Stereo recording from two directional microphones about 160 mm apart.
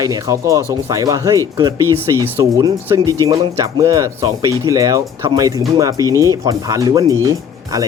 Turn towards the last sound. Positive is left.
turn(degrees=-25)  # may be behind; listen again after turning